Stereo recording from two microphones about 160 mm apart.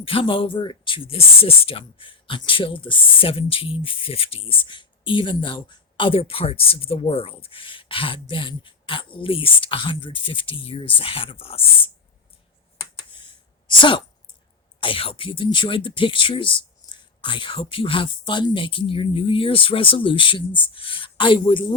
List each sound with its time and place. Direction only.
0.0 s speech: 35° left (ahead or behind)
13.1 s a sound: 30° left (ahead or behind)
14.8 s speech: 35° left (ahead or behind)